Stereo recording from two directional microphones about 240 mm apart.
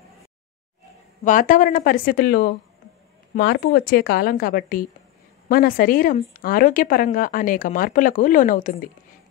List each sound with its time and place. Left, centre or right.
1.2 s speech: left